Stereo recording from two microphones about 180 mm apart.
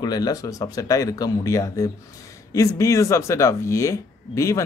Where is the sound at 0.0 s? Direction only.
20° left (ahead or behind).